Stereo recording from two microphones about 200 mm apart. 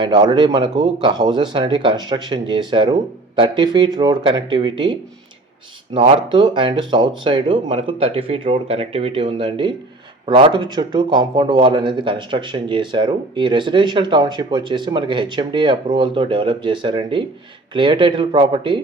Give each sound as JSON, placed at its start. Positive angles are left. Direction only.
{"t": 0.0, "sound": "speech", "side_deg": -20}